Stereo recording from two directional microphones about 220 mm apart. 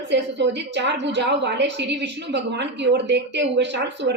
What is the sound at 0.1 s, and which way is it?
A woman's voice, 50° right (ahead or behind).